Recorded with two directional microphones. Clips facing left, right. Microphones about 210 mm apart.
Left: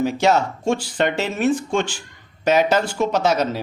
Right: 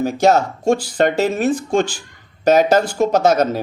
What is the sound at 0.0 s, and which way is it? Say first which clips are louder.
Speech: right 3 dB; 45° right (ahead or behind).